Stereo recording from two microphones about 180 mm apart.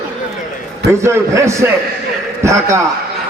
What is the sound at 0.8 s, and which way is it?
A man's voice, 15° right (ahead or behind).